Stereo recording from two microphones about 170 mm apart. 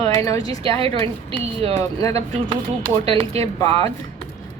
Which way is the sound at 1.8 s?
20° left (ahead or behind).